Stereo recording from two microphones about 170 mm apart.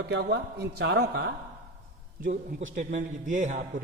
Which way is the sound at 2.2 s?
50° right (ahead or behind).